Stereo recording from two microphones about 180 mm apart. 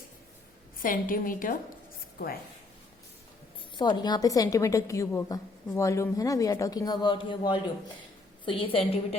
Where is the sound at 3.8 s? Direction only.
25° left (ahead or behind).